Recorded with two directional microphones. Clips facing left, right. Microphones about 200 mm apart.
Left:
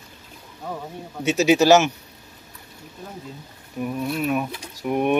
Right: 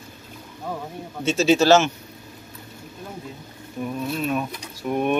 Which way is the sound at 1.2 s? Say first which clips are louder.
Left 1 dB; 15° left (ahead or behind).